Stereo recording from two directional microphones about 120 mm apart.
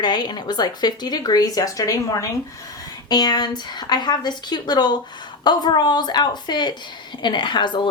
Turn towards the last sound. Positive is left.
turn(degrees=40)  # may be behind; listen again after turning